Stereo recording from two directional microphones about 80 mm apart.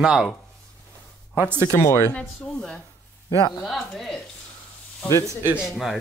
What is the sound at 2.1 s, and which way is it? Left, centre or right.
Speech, centre.